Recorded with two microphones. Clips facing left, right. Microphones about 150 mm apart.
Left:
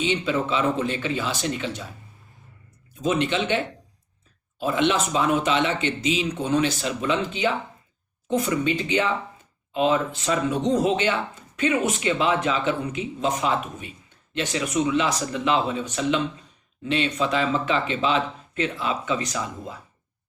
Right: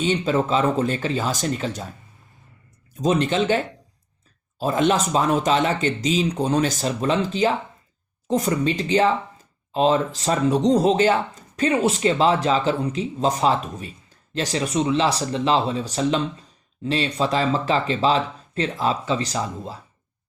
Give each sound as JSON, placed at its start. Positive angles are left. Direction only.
{"t": 0.0, "sound": "speech", "side_deg": -40}
{"t": 3.0, "sound": "speech", "side_deg": -40}